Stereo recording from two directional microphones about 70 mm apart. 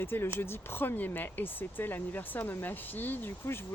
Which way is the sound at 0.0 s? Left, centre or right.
Left.